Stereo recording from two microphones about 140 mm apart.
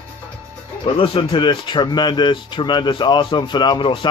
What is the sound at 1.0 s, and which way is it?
Speech, 40° left (ahead or behind).